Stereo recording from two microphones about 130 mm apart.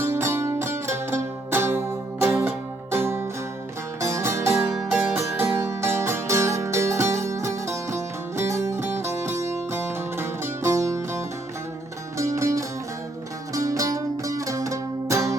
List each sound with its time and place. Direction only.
0.0 s music: 20° right (ahead or behind)
4.7 s music: 5° right (ahead or behind)
5.1 s music: 20° right (ahead or behind)